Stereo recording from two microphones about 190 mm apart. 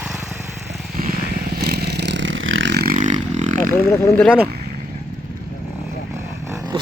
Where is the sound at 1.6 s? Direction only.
60° right (ahead or behind); by 3.5 s 40° right (ahead or behind).